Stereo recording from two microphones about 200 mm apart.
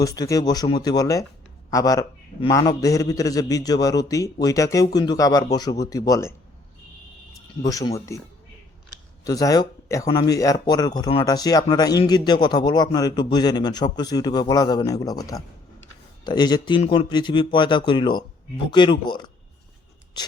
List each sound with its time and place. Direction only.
0.0 s a man's voice: 15° left (ahead or behind)
7.6 s a man's voice: 20° left (ahead or behind)
9.2 s speech: 20° left (ahead or behind)